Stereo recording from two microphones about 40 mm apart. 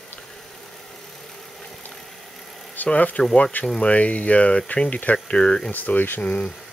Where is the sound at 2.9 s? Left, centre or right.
Left.